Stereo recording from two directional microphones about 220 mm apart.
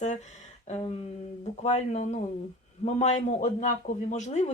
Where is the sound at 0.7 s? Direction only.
25° left (ahead or behind).